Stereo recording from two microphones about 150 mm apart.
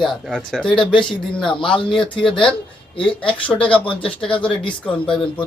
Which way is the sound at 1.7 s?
35° left (ahead or behind).